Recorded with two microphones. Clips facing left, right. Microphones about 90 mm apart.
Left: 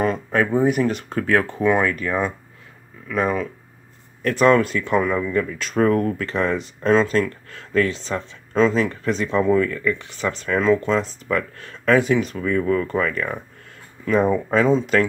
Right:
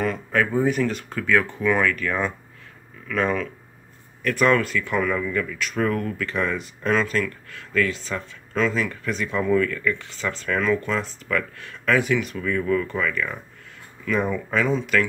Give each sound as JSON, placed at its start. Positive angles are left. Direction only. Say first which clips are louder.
{"t": 0.0, "sound": "a sound", "louder": "left 3 dB", "side_deg": 30}
{"t": 0.8, "sound": "speech", "louder": "left 3 dB", "side_deg": 30}
{"t": 1.7, "sound": "speech", "louder": "left 2 dB", "side_deg": 25}
{"t": 4.2, "sound": "speech", "louder": "left 4 dB", "side_deg": 30}